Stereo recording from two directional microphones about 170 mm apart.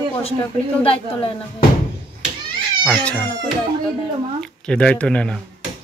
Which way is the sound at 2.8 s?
5° left (ahead or behind).